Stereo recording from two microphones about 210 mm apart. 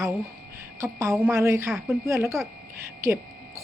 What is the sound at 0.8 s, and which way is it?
A woman's voice, 15° right (ahead or behind).